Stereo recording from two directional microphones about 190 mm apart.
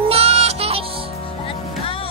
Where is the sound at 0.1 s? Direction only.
30° right (ahead or behind).